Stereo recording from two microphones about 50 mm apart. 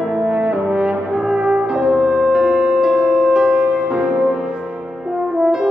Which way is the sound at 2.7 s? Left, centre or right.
Centre.